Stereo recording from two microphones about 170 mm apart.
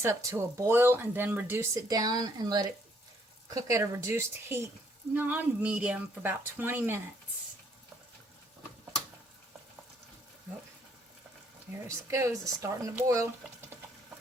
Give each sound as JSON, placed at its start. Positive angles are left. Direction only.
{"t": 0.0, "sound": "speech", "side_deg": -20}
{"t": 11.9, "sound": "speech", "side_deg": -15}